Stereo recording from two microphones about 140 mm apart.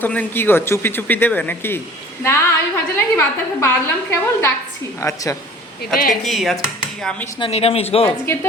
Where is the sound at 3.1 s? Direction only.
20° left (ahead or behind).